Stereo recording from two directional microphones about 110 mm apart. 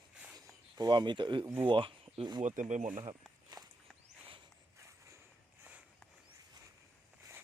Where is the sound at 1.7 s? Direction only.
50° right (ahead or behind).